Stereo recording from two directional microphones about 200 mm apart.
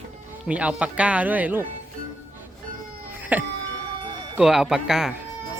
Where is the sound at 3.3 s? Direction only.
10° right (ahead or behind).